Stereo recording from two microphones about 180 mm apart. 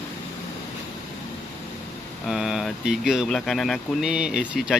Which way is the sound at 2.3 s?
5° right (ahead or behind).